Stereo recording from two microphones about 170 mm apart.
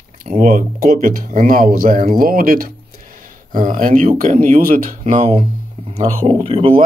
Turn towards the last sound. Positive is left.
turn(degrees=-35)  # may be behind; listen again after turning